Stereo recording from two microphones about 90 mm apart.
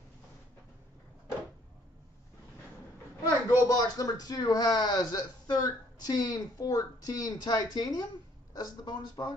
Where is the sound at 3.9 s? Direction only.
45° left (ahead or behind).